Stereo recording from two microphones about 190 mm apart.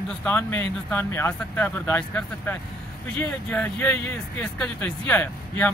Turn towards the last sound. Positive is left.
turn(degrees=10)  # may be behind; listen again after turning